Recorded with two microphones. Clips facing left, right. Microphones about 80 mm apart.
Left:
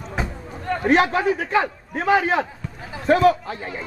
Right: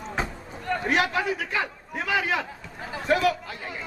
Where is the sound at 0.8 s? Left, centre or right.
Left.